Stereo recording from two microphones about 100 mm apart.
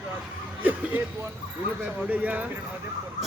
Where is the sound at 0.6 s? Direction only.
15° right (ahead or behind).